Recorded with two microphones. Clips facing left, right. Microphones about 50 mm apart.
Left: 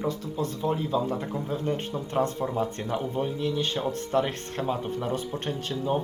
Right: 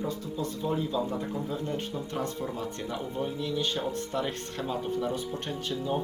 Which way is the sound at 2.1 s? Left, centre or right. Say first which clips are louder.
Left 9 dB; left.